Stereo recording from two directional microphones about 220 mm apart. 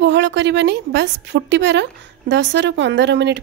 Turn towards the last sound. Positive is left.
turn(degrees=-50)  # may be behind; listen again after turning